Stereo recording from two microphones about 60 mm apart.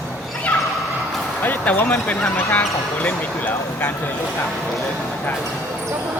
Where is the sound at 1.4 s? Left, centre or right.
Left.